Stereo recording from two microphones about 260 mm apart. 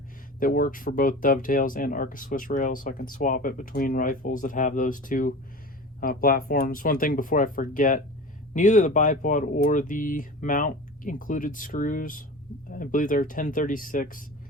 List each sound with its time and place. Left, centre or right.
0.3 s speech: left